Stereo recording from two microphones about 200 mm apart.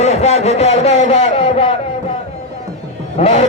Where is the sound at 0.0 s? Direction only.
35° left (ahead or behind).